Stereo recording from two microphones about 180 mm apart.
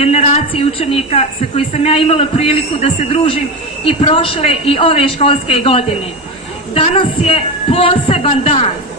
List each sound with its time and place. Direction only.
0.0 s a woman's voice: 35° left (ahead or behind)